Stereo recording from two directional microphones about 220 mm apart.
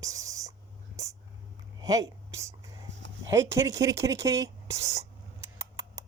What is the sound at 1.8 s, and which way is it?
Speech, 15° right (ahead or behind).